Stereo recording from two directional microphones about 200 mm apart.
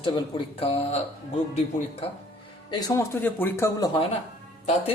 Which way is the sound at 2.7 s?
20° left (ahead or behind).